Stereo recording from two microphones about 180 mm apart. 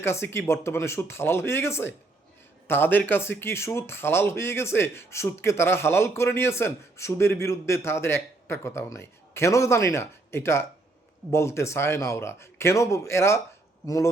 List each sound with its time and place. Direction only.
0.0 s speech: 15° left (ahead or behind)